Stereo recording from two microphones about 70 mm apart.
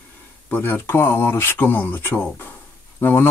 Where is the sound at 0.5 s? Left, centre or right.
Left.